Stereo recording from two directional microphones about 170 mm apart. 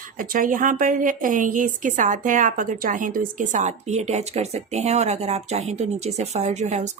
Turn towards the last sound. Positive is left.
turn(degrees=-40)  # may be behind; listen again after turning